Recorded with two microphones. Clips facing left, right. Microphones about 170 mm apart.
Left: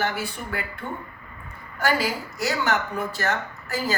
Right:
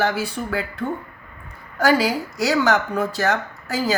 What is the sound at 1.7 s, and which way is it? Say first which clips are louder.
Speech: right 6 dB; 90° right.